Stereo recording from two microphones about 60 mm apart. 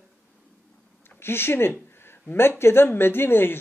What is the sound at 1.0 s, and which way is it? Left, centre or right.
Speech, left.